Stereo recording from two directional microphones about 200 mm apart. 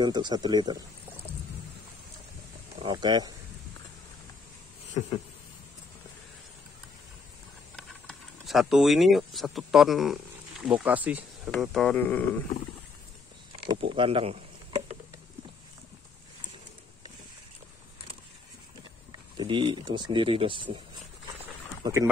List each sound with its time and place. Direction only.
0.0 s speech: 20° right (ahead or behind)
2.8 s speech: 25° right (ahead or behind)
7.7 s speech: centre (ahead or behind)
13.7 s speech: 25° right (ahead or behind)
19.3 s speech: 25° right (ahead or behind)
21.8 s speech: 15° right (ahead or behind)